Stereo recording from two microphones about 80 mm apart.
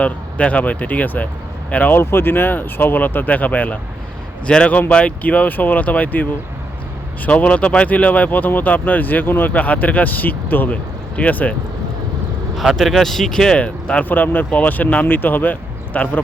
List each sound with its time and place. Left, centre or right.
0.0 s speech: centre
7.3 s speech: centre
12.5 s speech: centre; by 16.2 s left